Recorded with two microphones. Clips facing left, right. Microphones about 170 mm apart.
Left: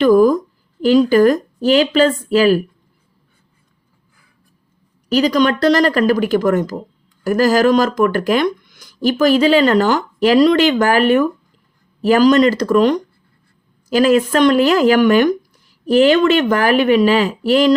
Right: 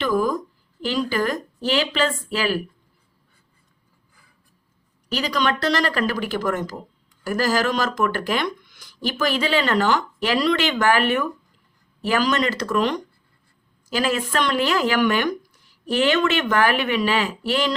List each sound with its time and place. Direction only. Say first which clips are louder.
0.0 s speech: left 11 dB; 45° left (ahead or behind)
5.1 s speech: left 9 dB; 45° left (ahead or behind)